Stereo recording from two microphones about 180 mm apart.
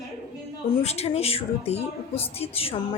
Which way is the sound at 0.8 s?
35° left (ahead or behind).